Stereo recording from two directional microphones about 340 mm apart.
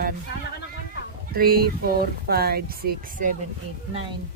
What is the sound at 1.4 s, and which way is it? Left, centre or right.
Speech, right.